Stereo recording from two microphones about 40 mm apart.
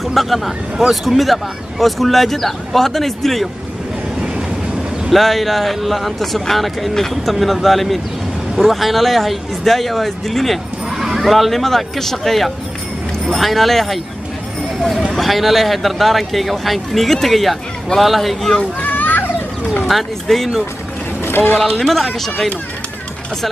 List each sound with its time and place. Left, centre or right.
0.1 s speech: centre
5.1 s speech: centre
18.8 s a sound: left
19.9 s speech: centre
21.7 s speech: centre